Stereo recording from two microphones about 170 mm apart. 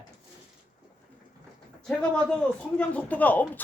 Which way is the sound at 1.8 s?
5° left (ahead or behind).